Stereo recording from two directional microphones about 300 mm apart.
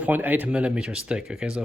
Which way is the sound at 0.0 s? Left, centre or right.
Centre.